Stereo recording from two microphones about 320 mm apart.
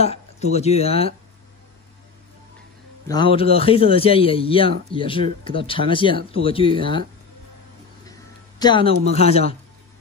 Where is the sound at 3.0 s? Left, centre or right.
Centre.